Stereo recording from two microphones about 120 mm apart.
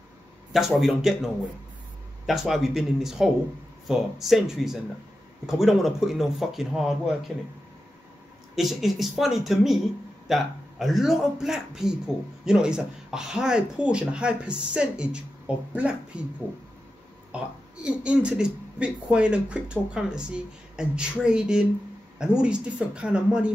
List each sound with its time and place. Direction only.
0.5 s a man's voice: centre (ahead or behind)
8.5 s a man's voice: centre (ahead or behind)
17.8 s speech: 10° right (ahead or behind)